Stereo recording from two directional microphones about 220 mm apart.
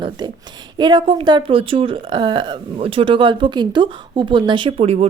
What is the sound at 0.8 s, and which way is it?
A woman's voice, 20° right (ahead or behind).